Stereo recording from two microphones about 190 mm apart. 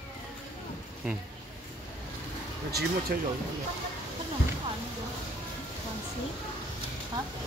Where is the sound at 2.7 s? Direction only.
55° right (ahead or behind).